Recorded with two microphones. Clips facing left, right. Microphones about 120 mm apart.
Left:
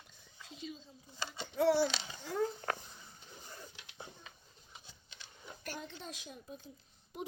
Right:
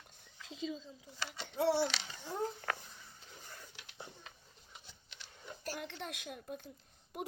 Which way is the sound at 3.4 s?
15° left (ahead or behind).